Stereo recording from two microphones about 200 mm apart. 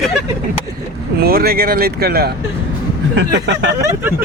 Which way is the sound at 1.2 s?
50° right (ahead or behind).